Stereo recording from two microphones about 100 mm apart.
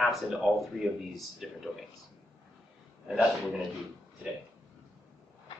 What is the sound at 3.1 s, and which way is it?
Speech, 10° right (ahead or behind).